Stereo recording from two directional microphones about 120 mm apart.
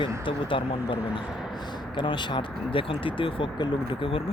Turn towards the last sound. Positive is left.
turn(degrees=45)  # may be behind; listen again after turning